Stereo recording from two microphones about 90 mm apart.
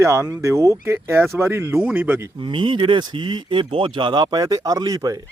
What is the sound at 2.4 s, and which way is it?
A man's voice, 65° right (ahead or behind).